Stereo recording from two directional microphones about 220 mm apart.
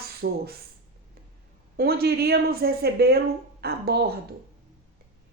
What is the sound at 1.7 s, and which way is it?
Speech, 45° right (ahead or behind).